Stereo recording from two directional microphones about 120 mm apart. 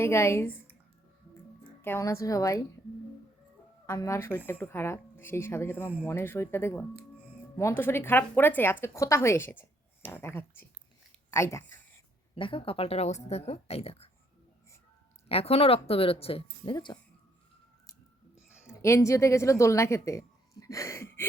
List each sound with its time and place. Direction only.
0.0 s speech: 20° left (ahead or behind)
1.8 s speech: 20° left (ahead or behind)
3.8 s speech: 25° left (ahead or behind)
12.3 s a woman's voice: 45° left (ahead or behind)
15.3 s speech: 55° left (ahead or behind)
16.7 s speech: 35° left (ahead or behind)
18.7 s a woman's voice: 25° left (ahead or behind)